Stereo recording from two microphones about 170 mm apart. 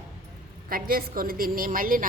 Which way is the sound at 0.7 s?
60° right (ahead or behind).